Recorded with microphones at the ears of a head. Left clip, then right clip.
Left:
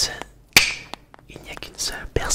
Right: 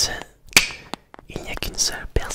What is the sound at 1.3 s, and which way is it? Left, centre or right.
Whispering, right.